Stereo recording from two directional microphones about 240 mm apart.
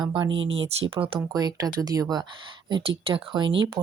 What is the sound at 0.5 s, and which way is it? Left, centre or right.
Speech, right.